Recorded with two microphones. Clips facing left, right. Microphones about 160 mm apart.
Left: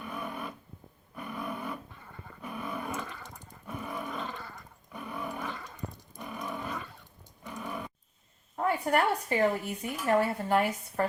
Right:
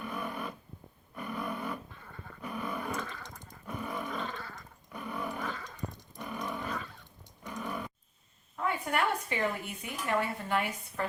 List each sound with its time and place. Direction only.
0.1 s a sound: 5° left (ahead or behind)
2.4 s roar: 5° left (ahead or behind)
7.4 s dog: centre (ahead or behind)
8.5 s a woman's voice: 40° left (ahead or behind)